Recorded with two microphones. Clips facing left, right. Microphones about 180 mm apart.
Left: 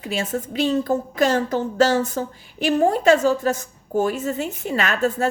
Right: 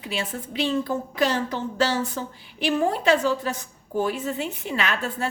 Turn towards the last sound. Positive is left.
turn(degrees=45)  # may be behind; listen again after turning